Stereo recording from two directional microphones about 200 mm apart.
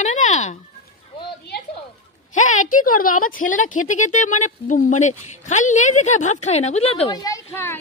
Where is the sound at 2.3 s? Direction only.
40° left (ahead or behind).